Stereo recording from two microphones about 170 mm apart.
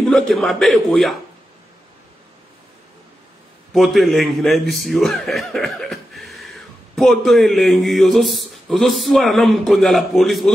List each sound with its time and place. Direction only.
0.1 s a man's voice: centre (ahead or behind)
3.7 s a man's voice: centre (ahead or behind)